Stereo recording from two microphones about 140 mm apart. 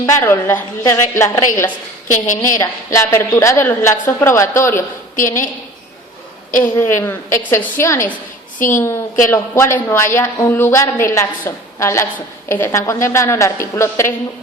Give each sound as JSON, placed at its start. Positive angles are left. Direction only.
{"t": 0.0, "sound": "a woman's voice", "side_deg": 20}
{"t": 2.0, "sound": "a woman's voice", "side_deg": 65}
{"t": 2.6, "sound": "a woman's voice", "side_deg": 20}
{"t": 6.6, "sound": "a woman's voice", "side_deg": 15}